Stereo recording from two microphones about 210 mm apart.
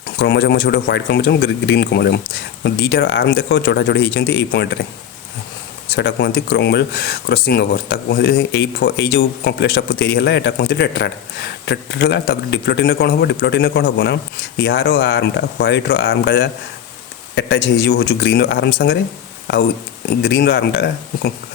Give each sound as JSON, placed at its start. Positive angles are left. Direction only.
{"t": 0.2, "sound": "speech", "side_deg": 55}
{"t": 6.0, "sound": "speech", "side_deg": 55}
{"t": 20.2, "sound": "speech", "side_deg": 50}